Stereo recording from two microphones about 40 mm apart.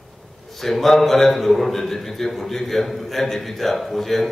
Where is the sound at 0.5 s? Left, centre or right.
Centre.